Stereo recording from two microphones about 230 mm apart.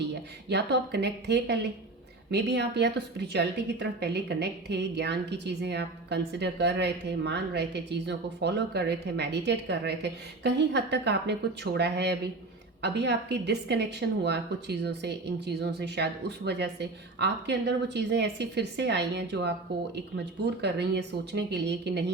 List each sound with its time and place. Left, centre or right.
0.1 s a woman's voice: right